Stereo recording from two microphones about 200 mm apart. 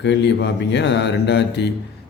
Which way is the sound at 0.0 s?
60° left (ahead or behind).